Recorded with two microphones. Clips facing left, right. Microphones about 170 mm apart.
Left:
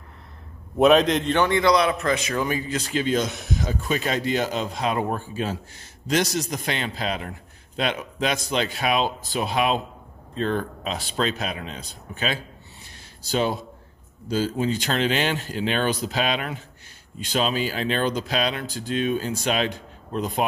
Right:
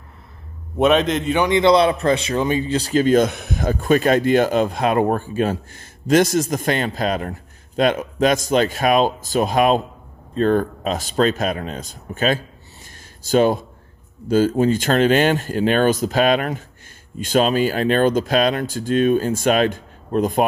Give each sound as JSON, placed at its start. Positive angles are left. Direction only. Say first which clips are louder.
{"t": 0.7, "sound": "a man's voice", "louder": "even", "side_deg": 0}
{"t": 1.6, "sound": "a man's voice", "louder": "right 5 dB", "side_deg": -30}